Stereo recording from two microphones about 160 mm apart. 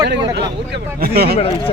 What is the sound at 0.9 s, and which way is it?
Speech, 70° right (ahead or behind).